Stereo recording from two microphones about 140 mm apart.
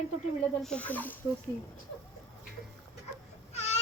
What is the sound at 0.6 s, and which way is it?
Speech, 10° left (ahead or behind).